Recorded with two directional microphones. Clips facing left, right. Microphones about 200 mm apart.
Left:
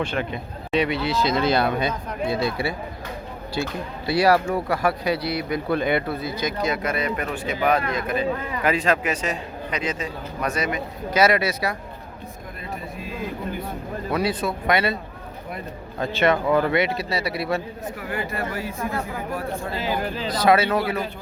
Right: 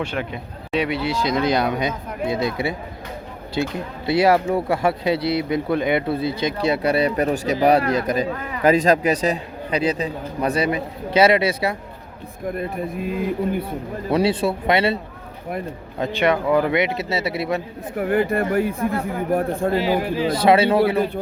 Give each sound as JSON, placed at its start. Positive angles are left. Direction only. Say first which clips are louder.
{"t": 0.0, "sound": "speech", "louder": "even", "side_deg": -10}
{"t": 12.5, "sound": "speech", "louder": "right 7 dB", "side_deg": -55}
{"t": 14.1, "sound": "speech", "louder": "right 5 dB", "side_deg": -30}
{"t": 16.0, "sound": "speech", "louder": "right 1 dB", "side_deg": -15}
{"t": 17.9, "sound": "speech", "louder": "right 12 dB", "side_deg": -55}
{"t": 20.3, "sound": "speech", "louder": "right 3 dB", "side_deg": -25}